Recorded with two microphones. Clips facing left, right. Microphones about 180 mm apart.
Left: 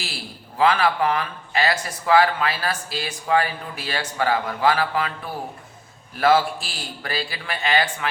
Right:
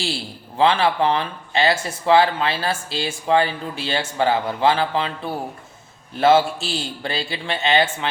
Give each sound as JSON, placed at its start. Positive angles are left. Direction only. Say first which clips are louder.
{"t": 0.0, "sound": "speech", "louder": "right 7 dB", "side_deg": -30}